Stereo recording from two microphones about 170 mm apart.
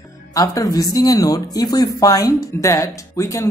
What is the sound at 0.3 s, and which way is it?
Speech, 20° left (ahead or behind).